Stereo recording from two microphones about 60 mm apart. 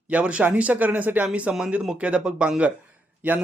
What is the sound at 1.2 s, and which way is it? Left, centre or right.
Speech, centre.